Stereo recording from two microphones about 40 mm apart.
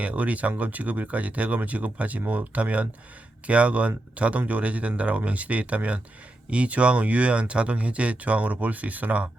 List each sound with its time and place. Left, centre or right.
0.0 s speech: right